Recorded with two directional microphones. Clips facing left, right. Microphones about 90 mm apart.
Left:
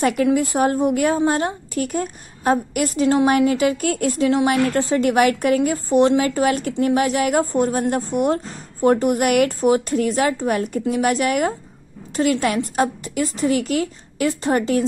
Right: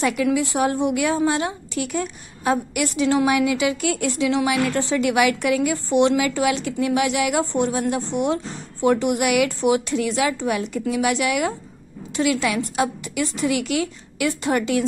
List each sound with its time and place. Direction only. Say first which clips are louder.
0.0 s a woman's voice: left 3 dB; 45° left (ahead or behind)